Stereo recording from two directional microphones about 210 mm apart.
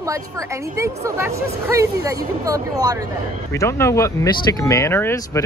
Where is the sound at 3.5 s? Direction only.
10° left (ahead or behind).